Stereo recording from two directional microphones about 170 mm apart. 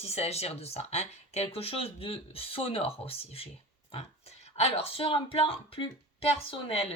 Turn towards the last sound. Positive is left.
turn(degrees=30)  # may be behind; listen again after turning